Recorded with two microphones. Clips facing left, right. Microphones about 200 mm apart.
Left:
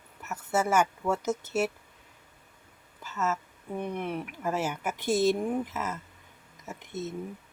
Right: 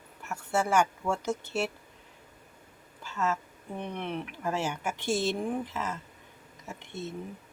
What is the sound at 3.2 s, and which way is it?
Speech, 5° left (ahead or behind).